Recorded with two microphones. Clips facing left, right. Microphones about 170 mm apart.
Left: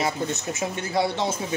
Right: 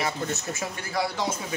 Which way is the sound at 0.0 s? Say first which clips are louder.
Left 3 dB; 20° left (ahead or behind).